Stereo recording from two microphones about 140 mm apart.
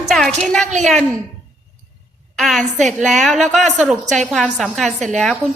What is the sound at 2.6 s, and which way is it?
Speech, 60° right (ahead or behind).